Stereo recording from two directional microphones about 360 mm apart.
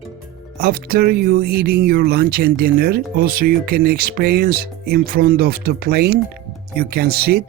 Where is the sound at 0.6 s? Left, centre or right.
Right.